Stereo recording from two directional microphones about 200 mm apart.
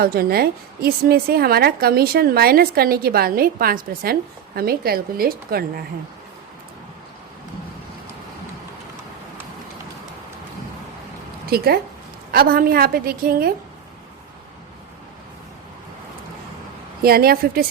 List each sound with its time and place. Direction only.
0.0 s a woman's voice: 50° right (ahead or behind)
11.4 s a woman's voice: 50° right (ahead or behind)
17.0 s a woman's voice: 50° right (ahead or behind)